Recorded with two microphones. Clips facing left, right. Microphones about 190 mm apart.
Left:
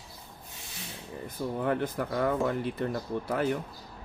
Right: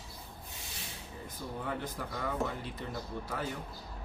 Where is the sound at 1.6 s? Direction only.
60° left (ahead or behind).